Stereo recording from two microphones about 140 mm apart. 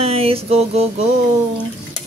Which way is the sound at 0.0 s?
45° right (ahead or behind).